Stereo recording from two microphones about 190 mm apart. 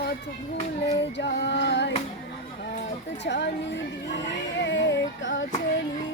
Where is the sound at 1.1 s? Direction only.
65° left (ahead or behind).